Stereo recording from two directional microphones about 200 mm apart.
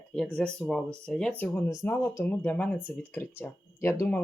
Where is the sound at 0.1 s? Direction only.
5° left (ahead or behind).